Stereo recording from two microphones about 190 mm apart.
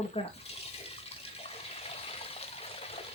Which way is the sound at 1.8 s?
30° left (ahead or behind).